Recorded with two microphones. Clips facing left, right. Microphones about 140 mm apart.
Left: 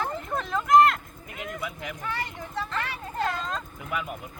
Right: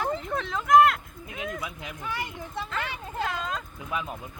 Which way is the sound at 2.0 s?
15° right (ahead or behind).